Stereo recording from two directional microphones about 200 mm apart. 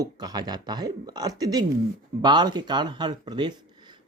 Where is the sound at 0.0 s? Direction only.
20° right (ahead or behind).